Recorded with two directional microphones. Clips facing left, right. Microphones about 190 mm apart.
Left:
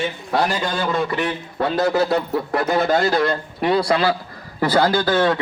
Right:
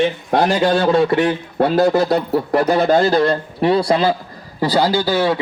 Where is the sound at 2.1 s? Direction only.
35° right (ahead or behind).